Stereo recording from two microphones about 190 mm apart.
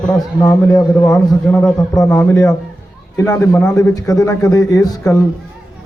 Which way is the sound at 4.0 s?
20° left (ahead or behind).